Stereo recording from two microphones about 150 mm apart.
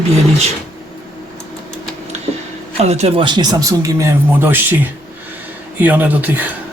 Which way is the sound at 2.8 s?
45° right (ahead or behind).